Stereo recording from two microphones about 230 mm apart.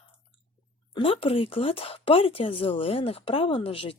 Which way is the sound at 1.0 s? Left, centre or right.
Left.